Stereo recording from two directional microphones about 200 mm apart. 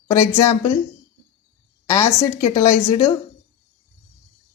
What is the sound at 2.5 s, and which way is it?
Speech, 15° left (ahead or behind).